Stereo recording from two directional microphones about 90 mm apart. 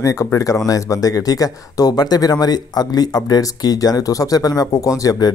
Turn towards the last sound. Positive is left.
turn(degrees=40)  # may be behind; listen again after turning